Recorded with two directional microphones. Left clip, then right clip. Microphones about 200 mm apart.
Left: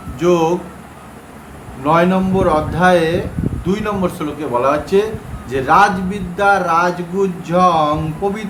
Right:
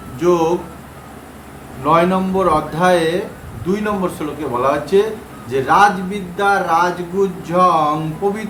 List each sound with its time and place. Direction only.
0.2 s speech: 20° left (ahead or behind)
1.8 s a man's voice: 10° left (ahead or behind)